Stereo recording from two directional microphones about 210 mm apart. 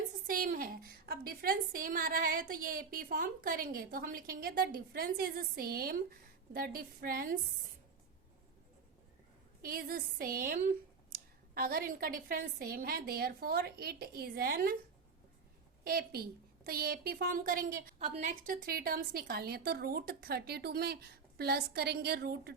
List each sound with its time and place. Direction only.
0.3 s a woman's voice: 40° right (ahead or behind)
9.6 s a woman's voice: 45° right (ahead or behind)
15.8 s a woman's voice: 45° right (ahead or behind)